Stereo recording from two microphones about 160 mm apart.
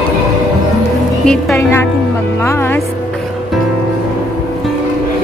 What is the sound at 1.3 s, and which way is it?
Speech, 5° left (ahead or behind).